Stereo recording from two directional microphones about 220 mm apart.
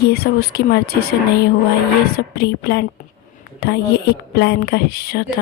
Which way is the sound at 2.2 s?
45° left (ahead or behind).